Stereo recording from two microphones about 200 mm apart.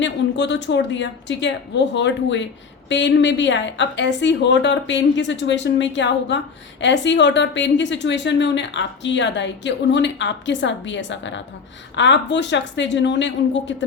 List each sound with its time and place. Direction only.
0.0 s a woman's voice: 60° left (ahead or behind)